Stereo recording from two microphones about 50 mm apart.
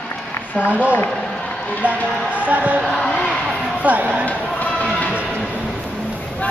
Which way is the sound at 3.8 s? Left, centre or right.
Right.